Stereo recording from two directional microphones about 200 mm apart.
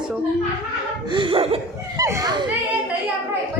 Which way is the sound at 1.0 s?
25° right (ahead or behind).